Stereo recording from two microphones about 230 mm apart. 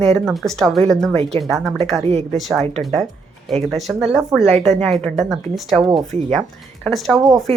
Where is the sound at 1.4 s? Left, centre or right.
Centre.